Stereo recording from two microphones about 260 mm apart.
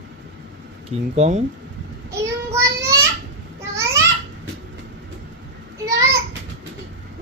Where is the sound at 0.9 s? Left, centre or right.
Right.